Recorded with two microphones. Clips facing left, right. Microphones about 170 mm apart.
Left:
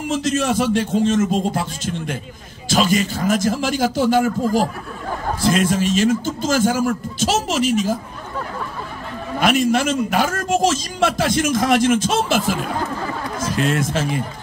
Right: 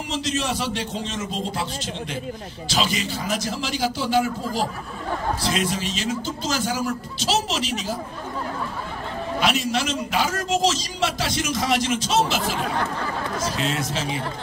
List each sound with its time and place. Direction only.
0.1 s a man's voice: 50° left (ahead or behind)
9.4 s a man's voice: 50° left (ahead or behind)